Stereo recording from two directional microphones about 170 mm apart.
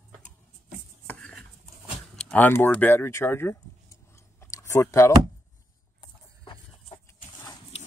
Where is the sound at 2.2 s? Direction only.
10° left (ahead or behind).